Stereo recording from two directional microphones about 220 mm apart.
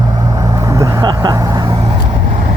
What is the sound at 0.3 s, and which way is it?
Vehicle, 15° right (ahead or behind).